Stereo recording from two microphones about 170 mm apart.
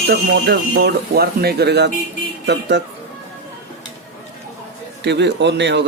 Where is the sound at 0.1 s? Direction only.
80° right.